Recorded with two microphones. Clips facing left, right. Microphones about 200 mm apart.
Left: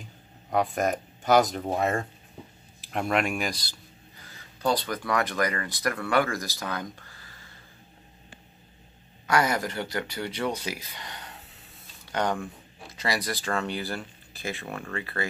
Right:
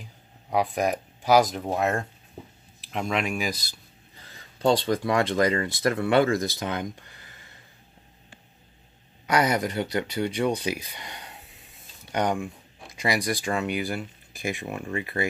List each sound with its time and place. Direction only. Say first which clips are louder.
0.5 s speech: right 1 dB; centre (ahead or behind)
4.6 s speech: right 5 dB; 30° right (ahead or behind)
9.3 s speech: right 2 dB; 20° right (ahead or behind)